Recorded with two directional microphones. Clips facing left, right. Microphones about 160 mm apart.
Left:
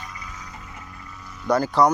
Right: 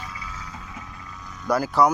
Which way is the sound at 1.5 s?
5° right (ahead or behind).